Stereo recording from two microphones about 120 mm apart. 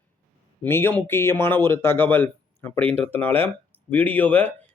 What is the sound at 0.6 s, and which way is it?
Speech, 20° left (ahead or behind).